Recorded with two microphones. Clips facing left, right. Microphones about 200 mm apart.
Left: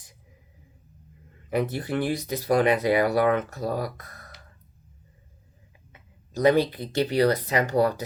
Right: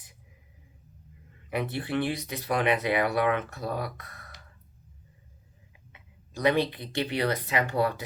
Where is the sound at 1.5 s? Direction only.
40° left (ahead or behind).